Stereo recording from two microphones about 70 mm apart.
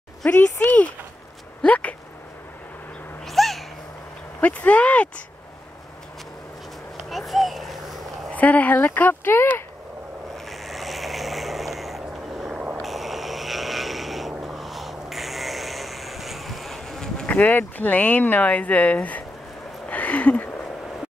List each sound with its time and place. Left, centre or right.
0.3 s speech: left
3.3 s a sound: centre
4.4 s speech: left
7.1 s speech: centre
8.4 s speech: left
10.3 s vehicle: centre
12.4 s vehicle: centre
12.8 s vehicle: centre
17.3 s speech: left
19.9 s a sound: left